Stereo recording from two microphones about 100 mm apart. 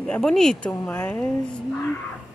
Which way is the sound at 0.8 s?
20° left (ahead or behind).